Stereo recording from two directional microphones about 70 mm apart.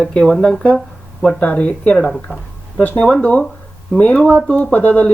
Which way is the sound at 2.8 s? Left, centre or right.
Left.